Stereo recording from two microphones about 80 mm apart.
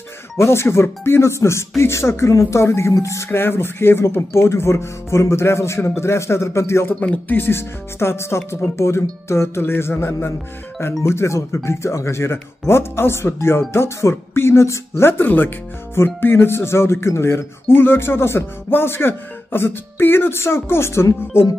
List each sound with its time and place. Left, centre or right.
0.4 s speech: left
7.0 s speech: centre